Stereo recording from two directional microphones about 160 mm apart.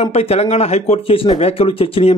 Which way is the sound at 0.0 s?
40° left (ahead or behind).